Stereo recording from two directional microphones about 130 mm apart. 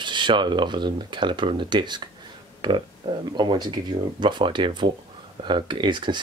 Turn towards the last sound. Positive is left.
turn(degrees=-35)  # may be behind; listen again after turning